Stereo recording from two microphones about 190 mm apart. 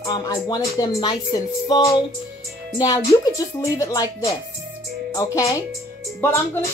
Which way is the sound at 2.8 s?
20° left (ahead or behind).